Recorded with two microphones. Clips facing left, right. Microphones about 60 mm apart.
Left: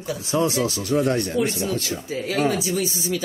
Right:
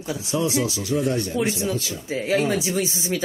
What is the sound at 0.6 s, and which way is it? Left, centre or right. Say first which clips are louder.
Speech: left 2 dB; left.